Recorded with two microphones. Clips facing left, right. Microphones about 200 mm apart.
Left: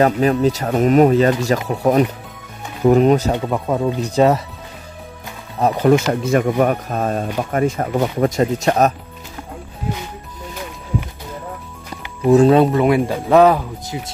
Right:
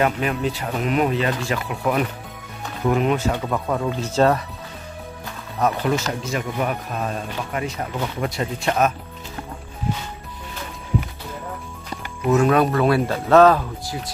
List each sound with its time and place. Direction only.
0.0 s speech: 35° left (ahead or behind)
3.3 s speech: 20° left (ahead or behind)
5.6 s speech: 30° left (ahead or behind)
6.2 s speech: 55° left (ahead or behind)
12.3 s speech: 30° left (ahead or behind)